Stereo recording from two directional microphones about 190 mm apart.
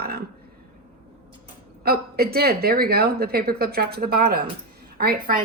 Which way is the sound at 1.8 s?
55° right (ahead or behind).